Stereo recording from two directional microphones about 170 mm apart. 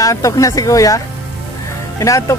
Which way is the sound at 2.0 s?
20° left (ahead or behind).